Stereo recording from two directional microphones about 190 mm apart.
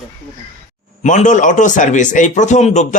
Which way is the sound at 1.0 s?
40° left (ahead or behind).